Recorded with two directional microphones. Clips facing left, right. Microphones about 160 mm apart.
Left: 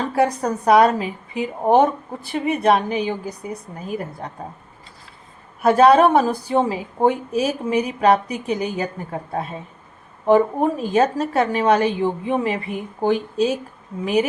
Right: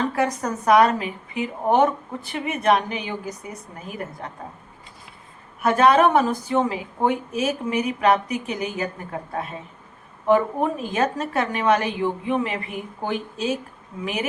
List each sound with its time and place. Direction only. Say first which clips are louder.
0.2 s a woman's voice: left 4 dB; 30° left (ahead or behind)
5.6 s a woman's voice: left 4 dB; 35° left (ahead or behind)